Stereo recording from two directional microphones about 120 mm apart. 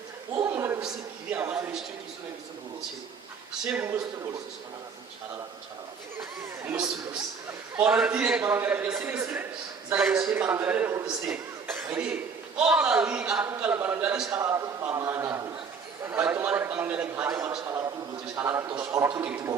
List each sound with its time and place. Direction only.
0.3 s a sound: 25° right (ahead or behind)
1.3 s a man's voice: 15° right (ahead or behind)
3.6 s a man's voice: 5° right (ahead or behind)
6.1 s speech: 15° right (ahead or behind)
6.7 s a sound: 5° right (ahead or behind)
7.8 s a man's voice: 10° right (ahead or behind)
18.7 s a man's voice: 40° right (ahead or behind)